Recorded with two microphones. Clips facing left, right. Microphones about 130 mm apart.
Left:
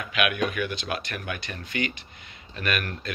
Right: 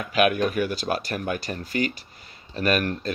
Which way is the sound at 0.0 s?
35° right (ahead or behind).